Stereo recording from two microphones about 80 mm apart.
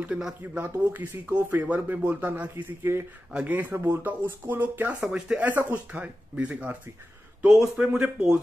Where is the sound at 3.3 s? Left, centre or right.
Centre.